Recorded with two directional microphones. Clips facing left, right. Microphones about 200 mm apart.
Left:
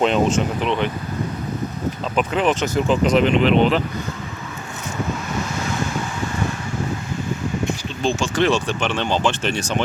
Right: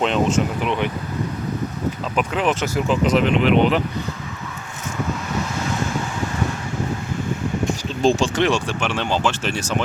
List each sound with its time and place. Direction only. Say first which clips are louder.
0.0 s speech: left 1 dB; centre (ahead or behind)
0.6 s speech: left 1 dB; 10° right (ahead or behind)
2.1 s speech: left 2 dB; 5° right (ahead or behind)
8.0 s speech: right 4 dB; 40° right (ahead or behind)
8.4 s speech: left 1 dB; 15° right (ahead or behind)